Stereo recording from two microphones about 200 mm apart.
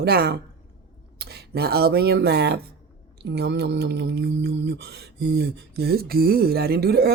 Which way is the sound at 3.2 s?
55° right (ahead or behind).